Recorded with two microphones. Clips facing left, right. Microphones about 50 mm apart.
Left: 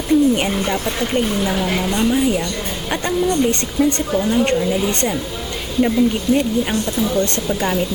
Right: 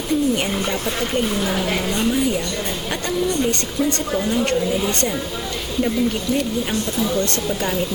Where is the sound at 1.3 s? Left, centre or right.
Centre.